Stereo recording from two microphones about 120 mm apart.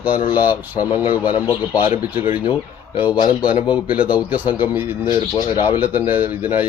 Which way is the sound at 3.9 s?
10° right (ahead or behind).